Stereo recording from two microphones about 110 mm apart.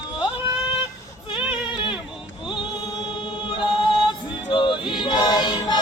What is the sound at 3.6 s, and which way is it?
Choir, 45° left (ahead or behind).